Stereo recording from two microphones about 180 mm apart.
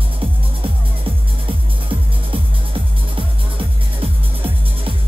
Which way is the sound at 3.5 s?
30° right (ahead or behind).